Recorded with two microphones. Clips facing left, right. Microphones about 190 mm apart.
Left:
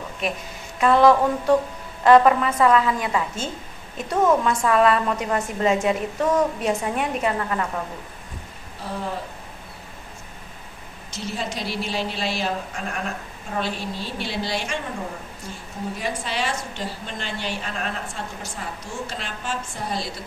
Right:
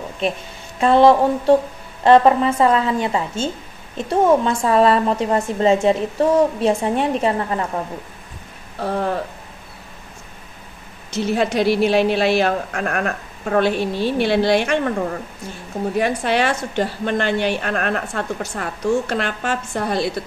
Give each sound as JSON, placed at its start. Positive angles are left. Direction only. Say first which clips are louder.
{"t": 0.2, "sound": "a woman's voice", "louder": "right 5 dB", "side_deg": -25}
{"t": 8.7, "sound": "speech", "louder": "right 8 dB", "side_deg": -65}
{"t": 11.1, "sound": "a woman's voice", "louder": "right 10 dB", "side_deg": -65}
{"t": 16.0, "sound": "a woman's voice", "louder": "right 10 dB", "side_deg": -65}